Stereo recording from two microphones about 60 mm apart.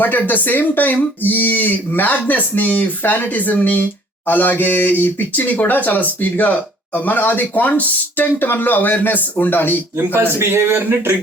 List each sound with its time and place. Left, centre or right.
0.0 s speech: left
10.0 s a man's voice: right